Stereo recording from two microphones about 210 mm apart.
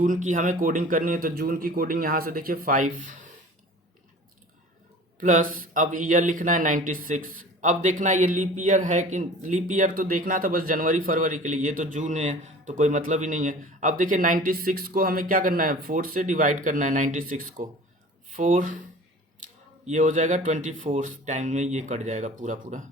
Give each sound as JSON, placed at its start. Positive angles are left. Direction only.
{"t": 0.0, "sound": "speech", "side_deg": -40}
{"t": 5.2, "sound": "speech", "side_deg": -40}